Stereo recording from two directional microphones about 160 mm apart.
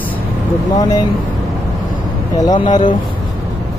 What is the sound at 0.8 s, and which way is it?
Speech, 25° left (ahead or behind).